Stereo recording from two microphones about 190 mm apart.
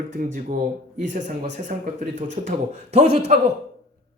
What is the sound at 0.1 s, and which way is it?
Speech, 40° right (ahead or behind).